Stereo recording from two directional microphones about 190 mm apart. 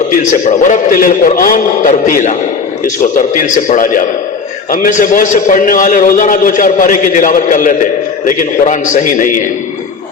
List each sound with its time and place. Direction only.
0.1 s a man's voice: 40° left (ahead or behind)